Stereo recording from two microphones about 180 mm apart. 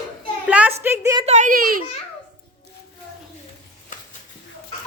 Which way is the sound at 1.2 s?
40° right (ahead or behind).